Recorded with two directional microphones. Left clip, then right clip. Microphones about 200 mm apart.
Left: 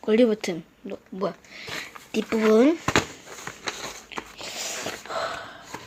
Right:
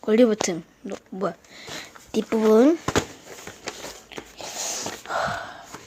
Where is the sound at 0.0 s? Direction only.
5° right (ahead or behind).